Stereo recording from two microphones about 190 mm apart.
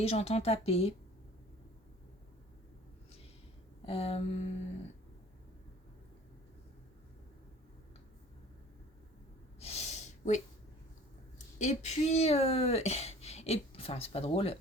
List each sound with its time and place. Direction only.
0.0 s a woman's voice: 35° left (ahead or behind)
3.8 s a woman's voice: 30° left (ahead or behind)
9.6 s a sound: 35° left (ahead or behind)
11.3 s speech: 40° left (ahead or behind)